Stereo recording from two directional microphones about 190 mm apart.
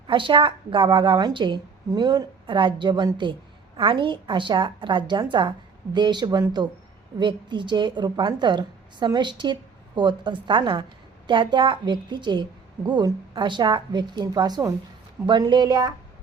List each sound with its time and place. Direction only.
0.1 s a woman's voice: 25° right (ahead or behind)